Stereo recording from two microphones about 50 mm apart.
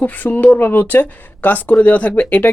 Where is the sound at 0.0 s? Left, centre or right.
Left.